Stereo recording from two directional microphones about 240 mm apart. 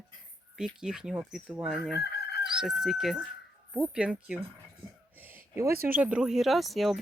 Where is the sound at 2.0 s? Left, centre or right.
Left.